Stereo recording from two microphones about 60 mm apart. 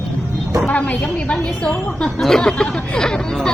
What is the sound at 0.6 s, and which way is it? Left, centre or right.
Speech, left.